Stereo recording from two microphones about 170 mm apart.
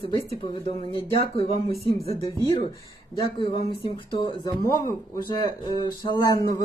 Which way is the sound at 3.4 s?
30° left (ahead or behind).